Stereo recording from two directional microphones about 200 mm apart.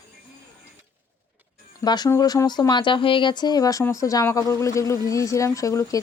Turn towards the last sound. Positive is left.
turn(degrees=15)  # may be behind; listen again after turning